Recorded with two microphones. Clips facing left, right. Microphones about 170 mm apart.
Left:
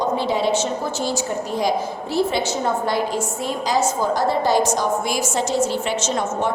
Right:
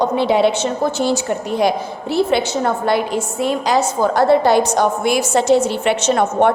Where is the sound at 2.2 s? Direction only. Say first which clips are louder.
Right 4 dB; 65° right (ahead or behind).